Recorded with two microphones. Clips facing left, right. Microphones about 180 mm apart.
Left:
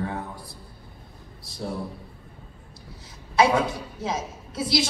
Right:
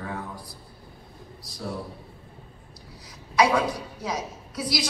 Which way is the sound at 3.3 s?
25° left (ahead or behind).